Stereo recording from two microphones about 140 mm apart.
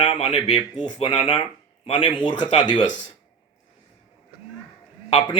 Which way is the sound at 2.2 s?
35° left (ahead or behind).